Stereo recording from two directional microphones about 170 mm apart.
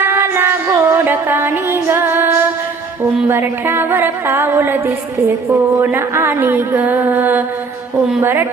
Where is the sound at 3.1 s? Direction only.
15° right (ahead or behind).